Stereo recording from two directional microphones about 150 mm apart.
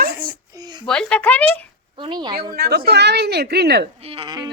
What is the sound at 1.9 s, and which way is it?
Speech, 30° right (ahead or behind).